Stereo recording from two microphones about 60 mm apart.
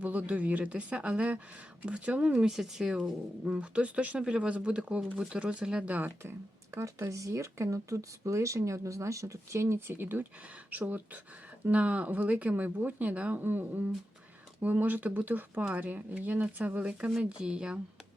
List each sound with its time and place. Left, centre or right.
0.0 s speech: right
7.1 s speech: right; by 17.7 s centre